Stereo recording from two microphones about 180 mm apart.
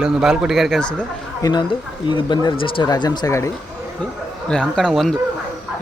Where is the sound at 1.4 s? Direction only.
20° left (ahead or behind).